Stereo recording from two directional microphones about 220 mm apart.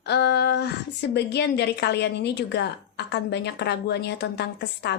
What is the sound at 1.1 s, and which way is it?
A woman's voice, 50° left (ahead or behind).